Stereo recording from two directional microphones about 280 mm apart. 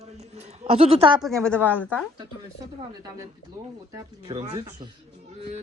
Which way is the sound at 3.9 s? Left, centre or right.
Centre.